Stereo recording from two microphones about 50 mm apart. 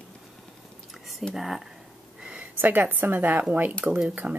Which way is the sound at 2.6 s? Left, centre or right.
Right.